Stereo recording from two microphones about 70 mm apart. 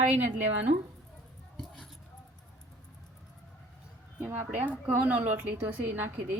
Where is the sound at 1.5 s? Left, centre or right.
Centre.